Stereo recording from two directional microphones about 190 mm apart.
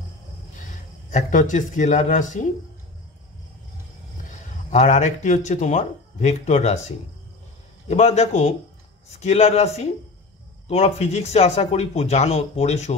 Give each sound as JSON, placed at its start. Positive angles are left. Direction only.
{"t": 0.6, "sound": "speech", "side_deg": 40}
{"t": 4.3, "sound": "speech", "side_deg": 40}
{"t": 7.9, "sound": "speech", "side_deg": 35}